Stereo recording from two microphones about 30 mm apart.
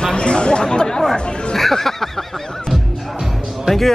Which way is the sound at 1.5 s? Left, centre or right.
Centre.